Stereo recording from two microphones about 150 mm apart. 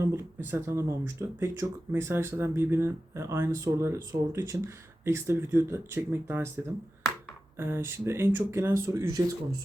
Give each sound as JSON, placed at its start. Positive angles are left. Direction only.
{"t": 0.0, "sound": "speech", "side_deg": -15}
{"t": 7.6, "sound": "speech", "side_deg": -15}